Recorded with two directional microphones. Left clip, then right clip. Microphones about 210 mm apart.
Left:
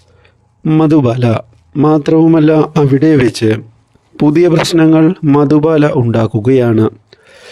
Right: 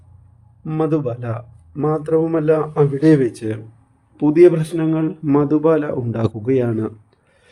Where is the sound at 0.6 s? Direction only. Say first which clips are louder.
Left 10 dB; 45° left (ahead or behind).